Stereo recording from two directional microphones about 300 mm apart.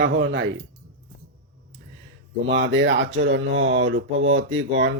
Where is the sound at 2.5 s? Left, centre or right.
Right.